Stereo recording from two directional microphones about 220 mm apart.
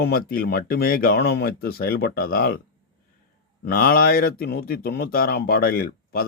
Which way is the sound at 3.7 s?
40° left (ahead or behind).